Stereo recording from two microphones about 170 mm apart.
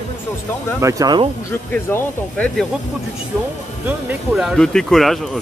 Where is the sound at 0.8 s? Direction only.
25° right (ahead or behind).